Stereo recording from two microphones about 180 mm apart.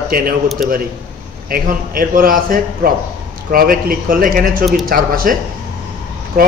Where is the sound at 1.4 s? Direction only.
55° right (ahead or behind).